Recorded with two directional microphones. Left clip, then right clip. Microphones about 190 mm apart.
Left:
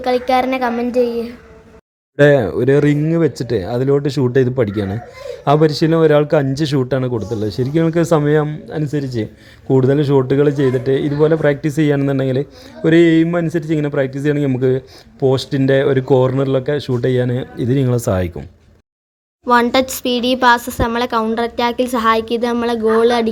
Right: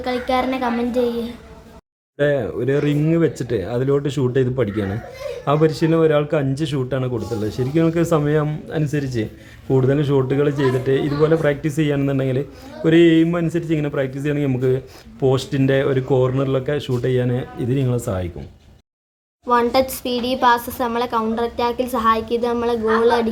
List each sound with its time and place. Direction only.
0.0 s speech: 35° left (ahead or behind)
2.1 s a woman's voice: 35° left (ahead or behind)
19.5 s a woman's voice: 40° left (ahead or behind)